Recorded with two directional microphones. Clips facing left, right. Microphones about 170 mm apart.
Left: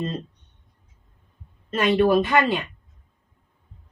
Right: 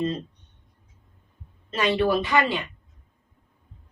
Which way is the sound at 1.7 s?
50° left (ahead or behind).